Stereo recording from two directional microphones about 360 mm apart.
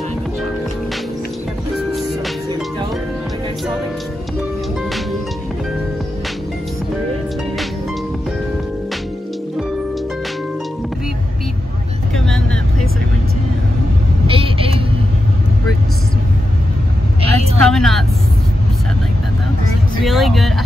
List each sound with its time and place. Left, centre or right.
14.2 s vehicle: centre
17.2 s vehicle: centre
17.6 s vehicle: centre
20.0 s vehicle: centre